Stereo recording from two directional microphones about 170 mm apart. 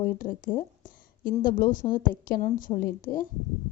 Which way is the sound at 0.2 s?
55° left (ahead or behind).